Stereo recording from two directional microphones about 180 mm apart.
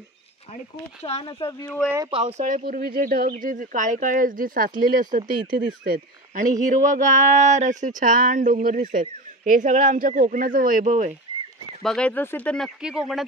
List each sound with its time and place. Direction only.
1.2 s speech: 20° left (ahead or behind)
2.0 s speech: 35° right (ahead or behind); by 5.2 s 50° right (ahead or behind)
5.3 s speech: 25° right (ahead or behind)
5.9 s speech: 45° right (ahead or behind)
11.8 s speech: 5° left (ahead or behind)